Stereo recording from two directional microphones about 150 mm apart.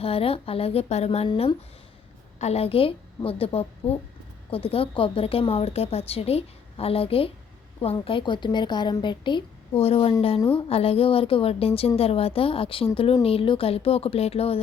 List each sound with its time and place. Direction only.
0.0 s a woman's voice: 40° left (ahead or behind)
1.3 s a woman's voice: 35° left (ahead or behind)
2.4 s a woman's voice: 45° left (ahead or behind)